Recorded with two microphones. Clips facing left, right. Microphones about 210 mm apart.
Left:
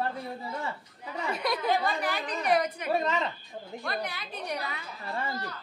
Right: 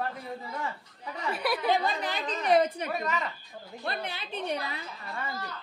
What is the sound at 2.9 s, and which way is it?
Speech, 25° left (ahead or behind).